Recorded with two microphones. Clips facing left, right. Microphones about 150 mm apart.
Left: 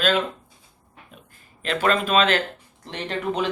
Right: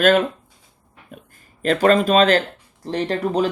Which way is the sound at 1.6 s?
45° right (ahead or behind).